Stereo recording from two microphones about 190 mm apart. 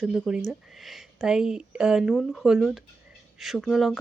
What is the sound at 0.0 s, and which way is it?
Speech, 5° right (ahead or behind).